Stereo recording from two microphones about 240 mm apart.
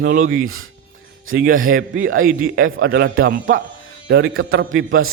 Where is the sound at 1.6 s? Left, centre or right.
Right.